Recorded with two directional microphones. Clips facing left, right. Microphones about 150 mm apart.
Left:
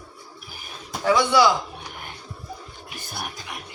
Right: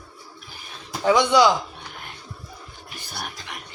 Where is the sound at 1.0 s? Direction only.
20° right (ahead or behind).